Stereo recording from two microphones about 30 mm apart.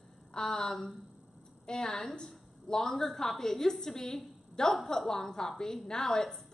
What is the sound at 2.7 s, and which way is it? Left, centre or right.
A woman's voice, centre.